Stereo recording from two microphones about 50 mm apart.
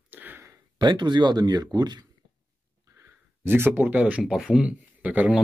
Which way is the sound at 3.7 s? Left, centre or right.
Right.